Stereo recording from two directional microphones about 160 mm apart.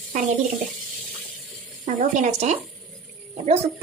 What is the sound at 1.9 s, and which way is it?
Speech, 45° right (ahead or behind).